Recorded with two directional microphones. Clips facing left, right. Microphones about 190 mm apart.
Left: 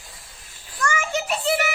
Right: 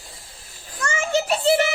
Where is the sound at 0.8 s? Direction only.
25° right (ahead or behind).